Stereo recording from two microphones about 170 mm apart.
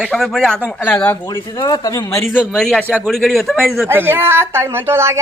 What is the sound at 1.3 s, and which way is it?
Speech, 25° left (ahead or behind).